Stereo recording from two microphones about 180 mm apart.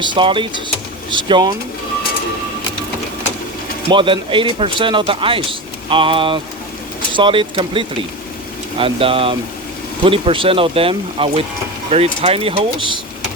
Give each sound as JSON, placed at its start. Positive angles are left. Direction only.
{"t": 0.0, "sound": "speech", "side_deg": -25}
{"t": 3.9, "sound": "speech", "side_deg": -30}